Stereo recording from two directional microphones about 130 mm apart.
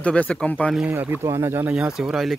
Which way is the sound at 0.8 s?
10° right (ahead or behind).